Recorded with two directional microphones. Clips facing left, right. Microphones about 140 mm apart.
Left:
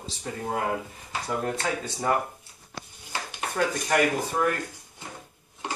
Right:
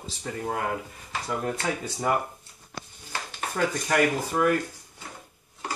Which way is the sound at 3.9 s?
Centre (ahead or behind).